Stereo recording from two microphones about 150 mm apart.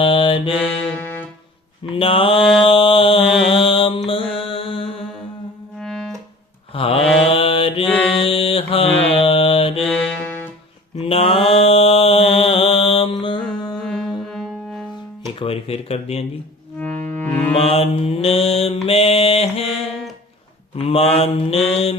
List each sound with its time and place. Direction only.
0.0 s mantra: 35° left (ahead or behind)
0.6 s music: 10° left (ahead or behind)
1.8 s mantra: 35° left (ahead or behind)
5.8 s music: 5° left (ahead or behind)
6.7 s mantra: 40° left (ahead or behind)
9.8 s music: 5° left (ahead or behind)
10.9 s mantra: 40° left (ahead or behind)
13.4 s music: 5° left (ahead or behind)
15.4 s mantra: 40° left (ahead or behind)
16.7 s music: 10° left (ahead or behind)
17.6 s mantra: 40° left (ahead or behind)